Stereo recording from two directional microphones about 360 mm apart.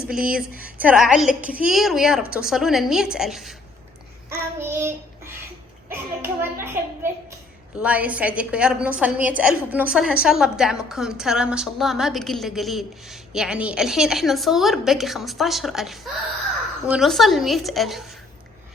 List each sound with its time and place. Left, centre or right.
0.1 s a woman's voice: centre
4.3 s child singing: centre
5.9 s a child's voice: centre